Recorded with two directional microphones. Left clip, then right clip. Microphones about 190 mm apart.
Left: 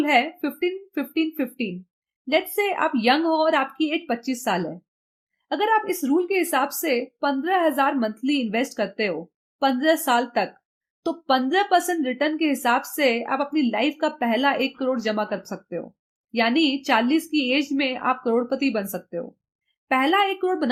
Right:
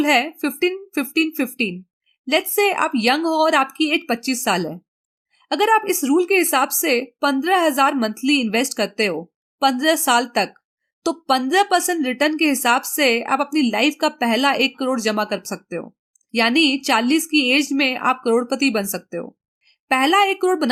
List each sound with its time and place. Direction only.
0.0 s a woman's voice: 30° right (ahead or behind)